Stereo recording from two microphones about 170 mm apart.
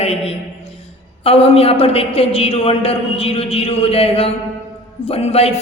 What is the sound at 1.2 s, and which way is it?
A man's voice, 35° left (ahead or behind).